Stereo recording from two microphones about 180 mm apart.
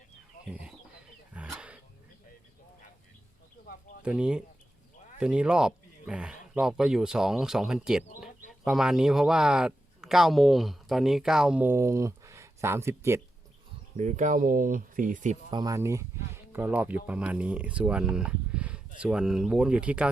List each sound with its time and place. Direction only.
0.4 s chicken: 5° right (ahead or behind)
1.3 s wild animals: 5° right (ahead or behind)
4.0 s speech: 5° right (ahead or behind)
13.9 s speech: 40° right (ahead or behind)
15.4 s speech: 20° right (ahead or behind); by 20.1 s 5° right (ahead or behind)